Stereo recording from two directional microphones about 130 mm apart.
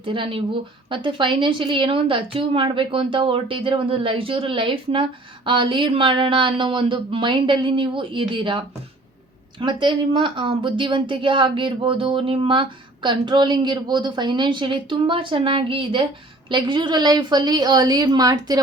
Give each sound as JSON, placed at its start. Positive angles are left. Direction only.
{"t": 0.0, "sound": "a woman's voice", "side_deg": -40}